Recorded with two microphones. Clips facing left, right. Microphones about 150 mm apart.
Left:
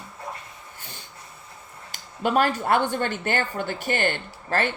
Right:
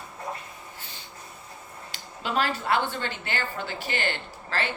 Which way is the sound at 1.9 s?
50° left (ahead or behind).